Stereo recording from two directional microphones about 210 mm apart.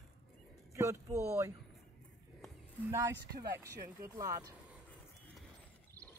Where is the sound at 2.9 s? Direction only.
15° right (ahead or behind).